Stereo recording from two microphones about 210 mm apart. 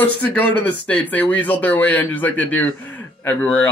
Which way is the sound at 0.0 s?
5° left (ahead or behind).